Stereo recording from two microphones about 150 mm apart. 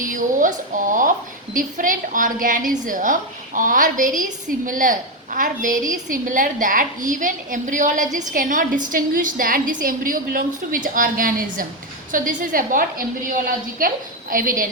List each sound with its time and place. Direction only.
0.0 s a woman's voice: 65° right (ahead or behind)